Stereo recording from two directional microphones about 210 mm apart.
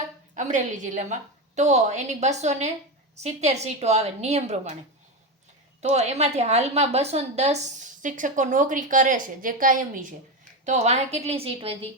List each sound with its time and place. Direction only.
0.3 s a woman's voice: 35° right (ahead or behind)
5.9 s a woman's voice: 30° right (ahead or behind)